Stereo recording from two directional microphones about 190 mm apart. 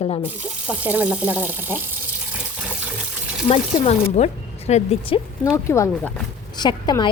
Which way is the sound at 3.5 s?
30° left (ahead or behind).